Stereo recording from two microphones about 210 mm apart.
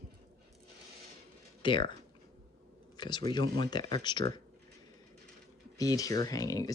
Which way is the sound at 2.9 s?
20° left (ahead or behind).